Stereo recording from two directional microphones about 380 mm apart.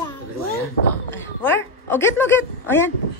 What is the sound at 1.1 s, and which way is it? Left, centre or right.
Speech, left.